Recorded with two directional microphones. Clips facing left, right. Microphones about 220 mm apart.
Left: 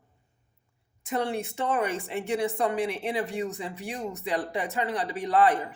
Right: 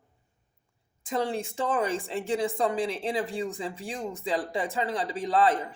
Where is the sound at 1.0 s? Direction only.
30° right (ahead or behind).